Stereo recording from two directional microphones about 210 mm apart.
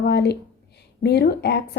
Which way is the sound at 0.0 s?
50° left (ahead or behind).